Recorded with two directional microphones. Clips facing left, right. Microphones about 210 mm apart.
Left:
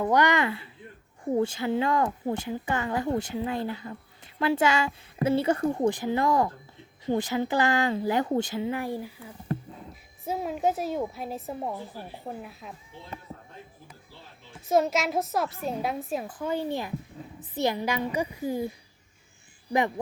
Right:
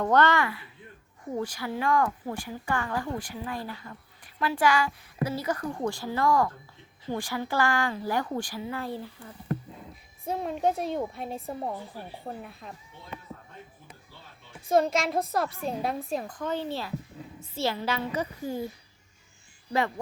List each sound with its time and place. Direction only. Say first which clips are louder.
0.0 s a woman's voice: even; 15° left (ahead or behind)
14.7 s a woman's voice: even; 5° left (ahead or behind)